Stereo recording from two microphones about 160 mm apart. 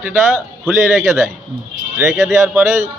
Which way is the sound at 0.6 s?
Centre (ahead or behind).